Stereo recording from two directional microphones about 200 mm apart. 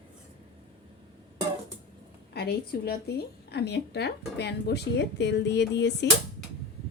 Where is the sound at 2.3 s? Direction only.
50° left (ahead or behind).